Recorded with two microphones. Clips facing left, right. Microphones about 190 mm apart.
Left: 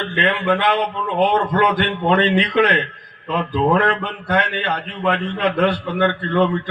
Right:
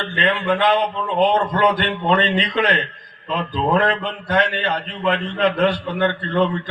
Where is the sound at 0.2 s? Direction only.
60° left (ahead or behind).